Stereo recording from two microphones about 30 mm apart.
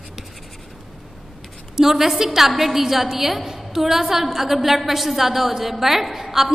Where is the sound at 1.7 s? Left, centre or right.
Centre.